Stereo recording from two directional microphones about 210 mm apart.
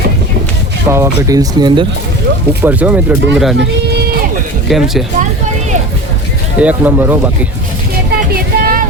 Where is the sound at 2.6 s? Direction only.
10° right (ahead or behind).